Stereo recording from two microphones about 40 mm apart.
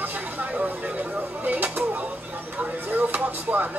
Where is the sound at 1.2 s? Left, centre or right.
Right.